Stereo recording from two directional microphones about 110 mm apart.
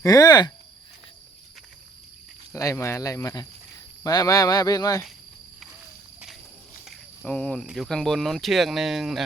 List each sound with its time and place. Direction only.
0.0 s speech: 35° left (ahead or behind)
2.5 s speech: 25° left (ahead or behind)
6.8 s cricket: centre (ahead or behind)
7.3 s speech: 10° left (ahead or behind)